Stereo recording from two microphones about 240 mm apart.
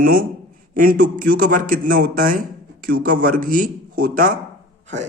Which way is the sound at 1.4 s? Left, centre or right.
Right.